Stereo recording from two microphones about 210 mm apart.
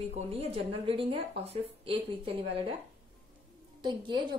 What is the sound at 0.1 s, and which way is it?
A woman's voice, 30° right (ahead or behind).